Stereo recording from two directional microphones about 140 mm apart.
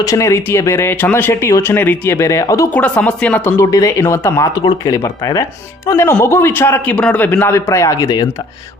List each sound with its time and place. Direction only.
0.0 s speech: 25° left (ahead or behind)
2.7 s a man's voice: 10° left (ahead or behind); by 8.3 s 30° left (ahead or behind)